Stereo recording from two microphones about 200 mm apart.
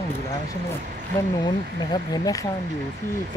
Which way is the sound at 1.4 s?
20° left (ahead or behind).